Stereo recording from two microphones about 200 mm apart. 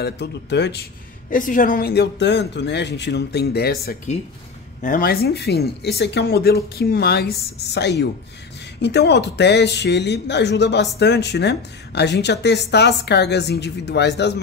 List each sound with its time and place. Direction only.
0.0 s speech: 55° left (ahead or behind)
1.3 s speech: 40° left (ahead or behind); by 14.3 s 55° left (ahead or behind)